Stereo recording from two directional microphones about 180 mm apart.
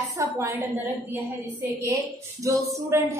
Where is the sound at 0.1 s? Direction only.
15° right (ahead or behind).